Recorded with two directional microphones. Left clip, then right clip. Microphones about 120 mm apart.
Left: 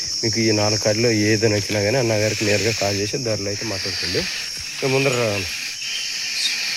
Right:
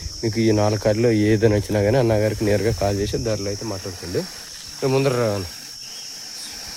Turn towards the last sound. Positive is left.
turn(degrees=-20)  # may be behind; listen again after turning